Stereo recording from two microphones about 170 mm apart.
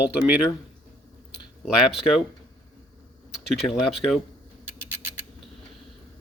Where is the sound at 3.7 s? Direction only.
Centre (ahead or behind).